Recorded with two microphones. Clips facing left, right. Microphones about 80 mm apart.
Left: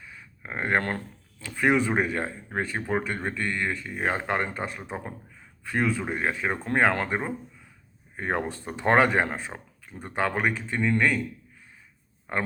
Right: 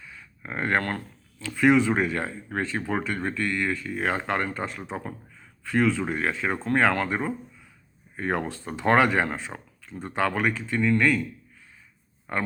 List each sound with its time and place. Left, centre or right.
0.0 s speech: centre